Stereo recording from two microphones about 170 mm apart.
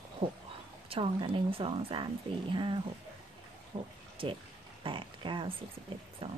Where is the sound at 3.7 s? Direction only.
30° right (ahead or behind).